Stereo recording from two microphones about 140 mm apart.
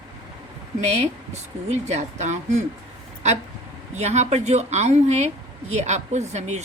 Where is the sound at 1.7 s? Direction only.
55° right (ahead or behind).